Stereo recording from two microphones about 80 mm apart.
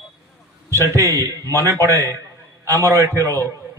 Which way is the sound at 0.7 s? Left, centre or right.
Right.